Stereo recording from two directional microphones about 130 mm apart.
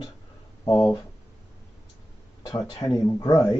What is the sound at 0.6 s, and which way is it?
Speech, 25° left (ahead or behind).